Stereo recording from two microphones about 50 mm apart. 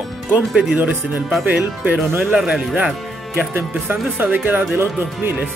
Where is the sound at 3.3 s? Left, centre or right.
Right.